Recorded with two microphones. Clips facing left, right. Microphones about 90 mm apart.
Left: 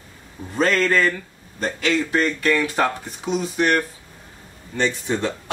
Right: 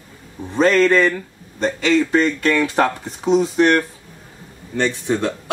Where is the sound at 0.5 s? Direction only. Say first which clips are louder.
Right 5 dB; centre (ahead or behind).